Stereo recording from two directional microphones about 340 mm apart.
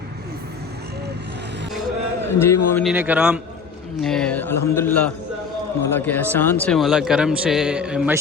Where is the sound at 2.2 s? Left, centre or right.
Centre.